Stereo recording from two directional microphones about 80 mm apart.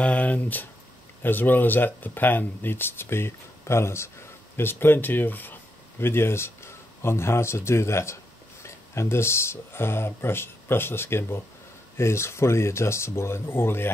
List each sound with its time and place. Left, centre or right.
0.0 s speech: centre